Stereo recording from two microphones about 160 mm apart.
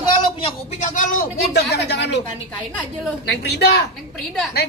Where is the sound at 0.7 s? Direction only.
55° left (ahead or behind); by 1.8 s 75° left (ahead or behind).